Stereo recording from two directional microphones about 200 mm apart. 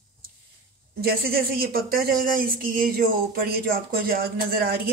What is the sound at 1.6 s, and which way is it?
Speech, 50° right (ahead or behind).